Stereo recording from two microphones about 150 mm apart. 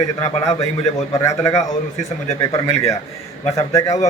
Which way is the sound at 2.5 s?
20° left (ahead or behind).